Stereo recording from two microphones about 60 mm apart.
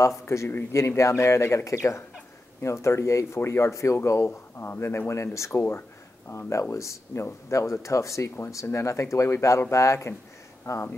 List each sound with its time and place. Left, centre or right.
0.3 s speech: left
4.6 s speech: left
6.7 s speech: left